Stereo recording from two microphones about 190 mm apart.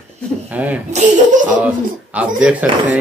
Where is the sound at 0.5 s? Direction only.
10° right (ahead or behind).